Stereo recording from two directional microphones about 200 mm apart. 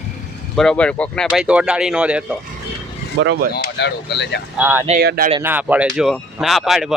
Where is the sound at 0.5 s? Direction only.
5° left (ahead or behind).